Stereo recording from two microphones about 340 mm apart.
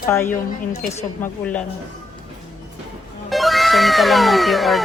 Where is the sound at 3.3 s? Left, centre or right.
Centre.